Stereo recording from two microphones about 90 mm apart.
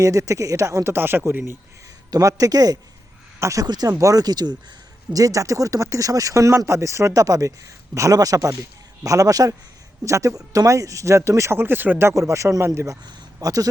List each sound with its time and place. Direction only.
0.0 s speech: 35° right (ahead or behind)
2.0 s speech: 40° right (ahead or behind)